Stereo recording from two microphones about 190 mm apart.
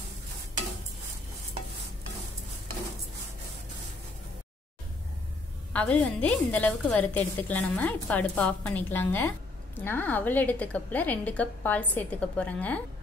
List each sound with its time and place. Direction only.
5.7 s a woman's voice: 5° left (ahead or behind)